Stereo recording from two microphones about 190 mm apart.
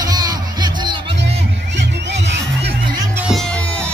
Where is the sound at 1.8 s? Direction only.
65° right (ahead or behind).